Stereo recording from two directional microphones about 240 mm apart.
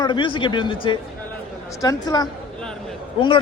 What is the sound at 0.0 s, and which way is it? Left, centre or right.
A man's voice, centre.